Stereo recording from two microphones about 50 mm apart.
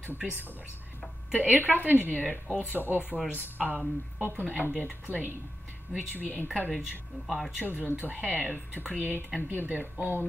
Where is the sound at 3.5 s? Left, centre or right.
Right.